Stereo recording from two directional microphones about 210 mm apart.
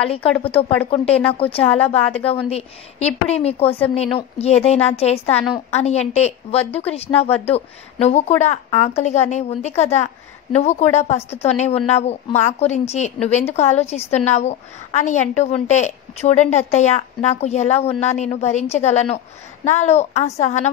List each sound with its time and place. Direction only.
0.8 s a woman's voice: 30° left (ahead or behind)